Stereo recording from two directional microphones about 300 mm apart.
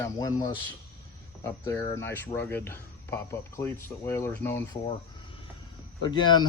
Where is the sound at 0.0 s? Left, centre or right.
Centre.